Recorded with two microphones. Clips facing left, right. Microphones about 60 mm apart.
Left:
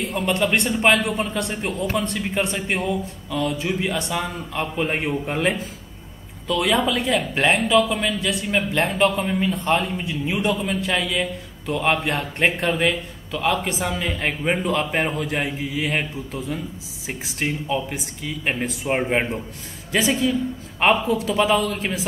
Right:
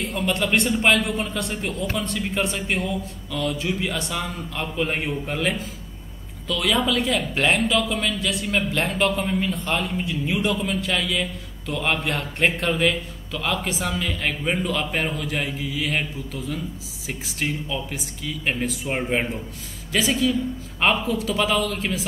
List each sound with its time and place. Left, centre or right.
0.1 s a man's voice: centre